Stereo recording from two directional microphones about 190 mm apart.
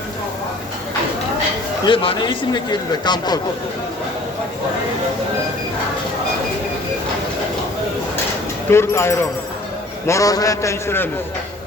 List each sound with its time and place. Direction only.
1.8 s speech: 30° left (ahead or behind)
8.7 s a man's voice: 15° left (ahead or behind)